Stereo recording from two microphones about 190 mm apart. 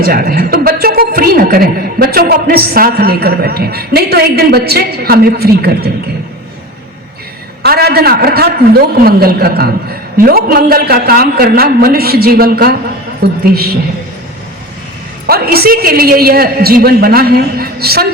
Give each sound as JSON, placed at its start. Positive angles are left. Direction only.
{"t": 0.0, "sound": "a woman's voice", "side_deg": -50}
{"t": 7.6, "sound": "a woman's voice", "side_deg": -55}
{"t": 15.3, "sound": "a woman's voice", "side_deg": -55}